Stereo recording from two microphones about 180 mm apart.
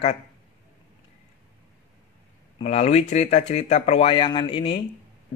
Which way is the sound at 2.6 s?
35° left (ahead or behind).